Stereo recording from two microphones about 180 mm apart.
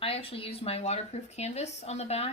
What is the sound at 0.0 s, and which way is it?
Speech, 30° left (ahead or behind).